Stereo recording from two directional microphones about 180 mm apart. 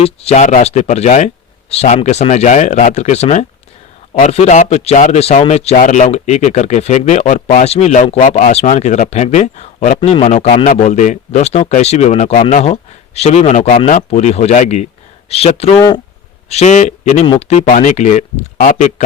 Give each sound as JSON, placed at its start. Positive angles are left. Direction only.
{"t": 0.0, "sound": "a man's voice", "side_deg": 35}